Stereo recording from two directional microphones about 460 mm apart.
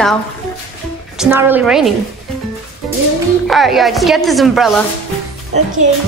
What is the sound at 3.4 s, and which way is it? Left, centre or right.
A woman's voice, centre.